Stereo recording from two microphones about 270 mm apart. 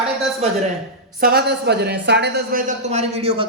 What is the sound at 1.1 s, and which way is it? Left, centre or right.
Speech, right.